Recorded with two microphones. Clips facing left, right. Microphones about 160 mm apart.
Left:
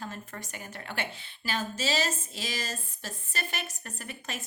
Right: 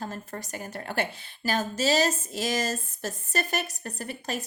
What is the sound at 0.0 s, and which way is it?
Speech, 40° right (ahead or behind).